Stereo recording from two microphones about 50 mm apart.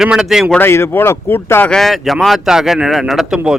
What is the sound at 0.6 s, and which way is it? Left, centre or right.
Speech, left.